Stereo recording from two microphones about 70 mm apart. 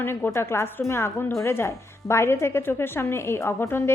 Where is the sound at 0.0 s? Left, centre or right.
Left.